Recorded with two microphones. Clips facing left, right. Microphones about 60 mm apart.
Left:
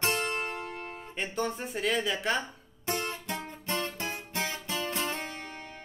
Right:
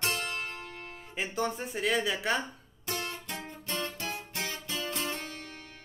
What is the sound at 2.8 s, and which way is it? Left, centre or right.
Music, left.